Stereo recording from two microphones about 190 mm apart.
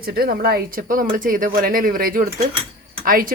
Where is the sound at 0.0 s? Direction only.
55° right (ahead or behind).